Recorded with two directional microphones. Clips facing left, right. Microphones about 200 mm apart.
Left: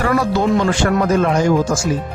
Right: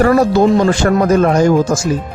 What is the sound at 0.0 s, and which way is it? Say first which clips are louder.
Speech: right 6 dB; 40° right (ahead or behind).